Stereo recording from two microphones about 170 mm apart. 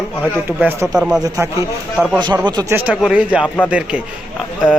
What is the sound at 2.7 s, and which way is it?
Speech, 10° right (ahead or behind).